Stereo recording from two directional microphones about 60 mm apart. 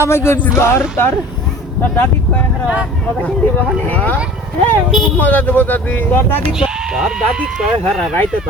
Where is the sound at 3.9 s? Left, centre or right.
Left.